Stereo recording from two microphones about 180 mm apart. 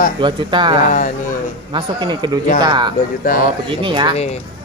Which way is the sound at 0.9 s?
50° left (ahead or behind).